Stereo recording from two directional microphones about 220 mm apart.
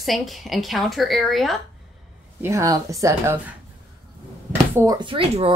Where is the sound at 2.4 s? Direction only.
15° right (ahead or behind).